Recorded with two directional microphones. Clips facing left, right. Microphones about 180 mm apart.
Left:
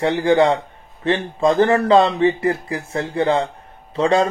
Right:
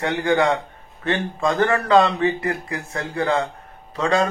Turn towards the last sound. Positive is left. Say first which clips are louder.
# left 4 dB
turn(degrees=30)  # may be behind; listen again after turning